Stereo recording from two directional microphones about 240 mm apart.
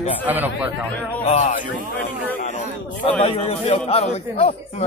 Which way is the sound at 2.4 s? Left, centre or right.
Left.